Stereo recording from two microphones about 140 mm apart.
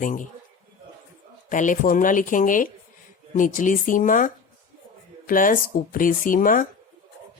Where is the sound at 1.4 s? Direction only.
65° left (ahead or behind).